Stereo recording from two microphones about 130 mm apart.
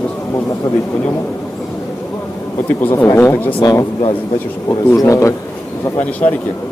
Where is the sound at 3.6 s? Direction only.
30° left (ahead or behind).